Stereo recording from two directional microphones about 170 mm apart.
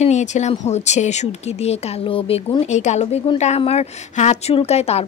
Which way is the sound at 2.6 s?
40° left (ahead or behind).